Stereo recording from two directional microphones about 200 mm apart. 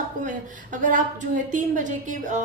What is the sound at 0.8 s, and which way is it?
A woman's voice, 40° right (ahead or behind).